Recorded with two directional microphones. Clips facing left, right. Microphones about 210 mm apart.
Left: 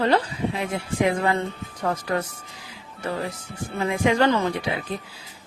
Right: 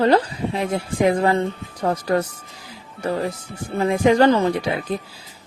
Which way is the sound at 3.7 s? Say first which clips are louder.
Right 5 dB; 35° right (ahead or behind).